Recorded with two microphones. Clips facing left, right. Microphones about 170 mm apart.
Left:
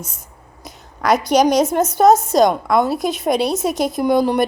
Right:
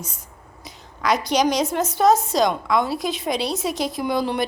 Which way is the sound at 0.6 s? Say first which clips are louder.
Left 4 dB; 50° left (ahead or behind).